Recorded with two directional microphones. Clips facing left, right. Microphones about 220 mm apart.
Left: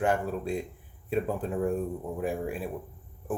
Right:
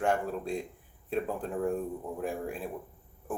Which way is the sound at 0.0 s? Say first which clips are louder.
Left 2 dB; 5° left (ahead or behind).